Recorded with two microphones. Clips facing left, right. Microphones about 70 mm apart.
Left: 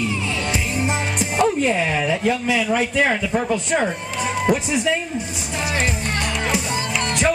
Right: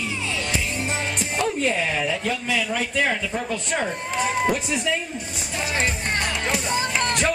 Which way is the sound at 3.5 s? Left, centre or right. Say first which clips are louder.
Left 5 dB; centre.